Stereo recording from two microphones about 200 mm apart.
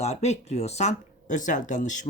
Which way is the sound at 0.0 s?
35° left (ahead or behind).